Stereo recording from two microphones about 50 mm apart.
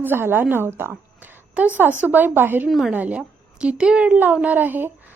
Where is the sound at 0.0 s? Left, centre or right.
Right.